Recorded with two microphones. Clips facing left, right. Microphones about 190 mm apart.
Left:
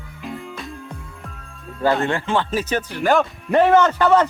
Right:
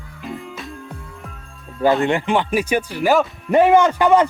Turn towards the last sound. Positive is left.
turn(degrees=-15)  # may be behind; listen again after turning